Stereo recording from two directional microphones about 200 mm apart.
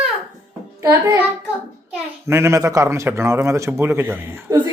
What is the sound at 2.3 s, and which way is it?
A man's voice, 15° right (ahead or behind).